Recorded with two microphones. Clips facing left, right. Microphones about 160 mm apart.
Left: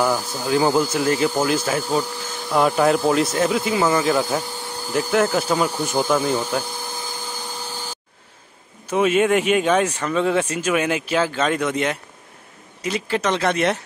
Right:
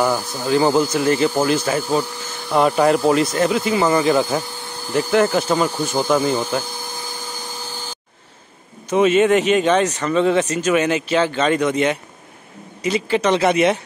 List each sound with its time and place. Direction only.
0.0 s speech: 10° right (ahead or behind)
0.8 s speech: centre (ahead or behind)
1.8 s speech: 10° right (ahead or behind)
8.9 s speech: 5° left (ahead or behind)